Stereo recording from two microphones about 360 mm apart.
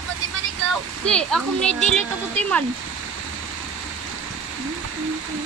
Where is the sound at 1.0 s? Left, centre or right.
Centre.